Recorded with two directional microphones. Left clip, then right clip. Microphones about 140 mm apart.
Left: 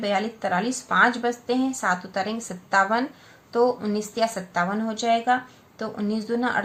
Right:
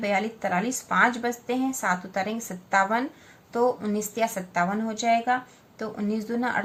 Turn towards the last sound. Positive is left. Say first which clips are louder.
# left 2 dB
turn(degrees=35)  # may be behind; listen again after turning